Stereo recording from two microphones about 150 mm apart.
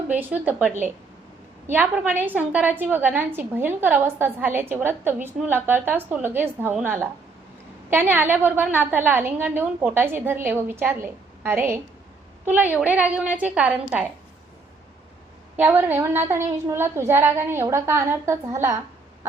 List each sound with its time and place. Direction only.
0.1 s a woman's voice: 10° right (ahead or behind)
15.5 s a woman's voice: 15° right (ahead or behind)